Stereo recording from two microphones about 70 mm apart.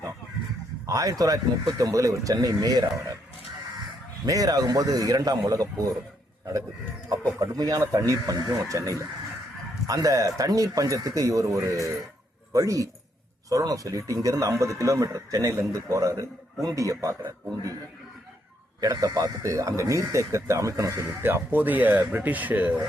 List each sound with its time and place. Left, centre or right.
0.9 s speech: right
4.3 s speech: right
18.8 s speech: right
21.1 s speech: right